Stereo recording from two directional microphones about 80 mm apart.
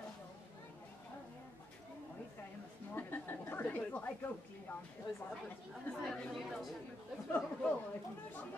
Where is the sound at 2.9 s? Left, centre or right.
Left.